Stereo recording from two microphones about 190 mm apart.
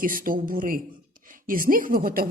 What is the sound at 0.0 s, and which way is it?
A woman's voice, 45° right (ahead or behind).